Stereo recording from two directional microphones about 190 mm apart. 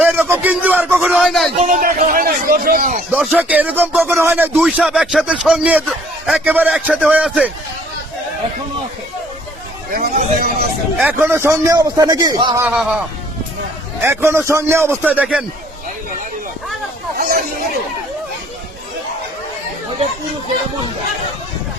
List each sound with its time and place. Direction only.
0.0 s a man's voice: 10° right (ahead or behind)
1.5 s a man's voice: 45° right (ahead or behind)
3.1 s speech: 5° right (ahead or behind)
9.9 s chatter: 50° right (ahead or behind)
10.9 s speech: 10° right (ahead or behind)
12.6 s a man's voice: 5° right (ahead or behind)
14.0 s speech: 10° right (ahead or behind)